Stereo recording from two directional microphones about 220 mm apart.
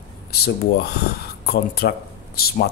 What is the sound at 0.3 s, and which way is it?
Speech, 45° left (ahead or behind).